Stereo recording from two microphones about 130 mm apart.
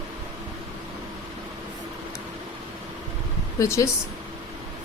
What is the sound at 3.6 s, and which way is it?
Speech, 25° left (ahead or behind).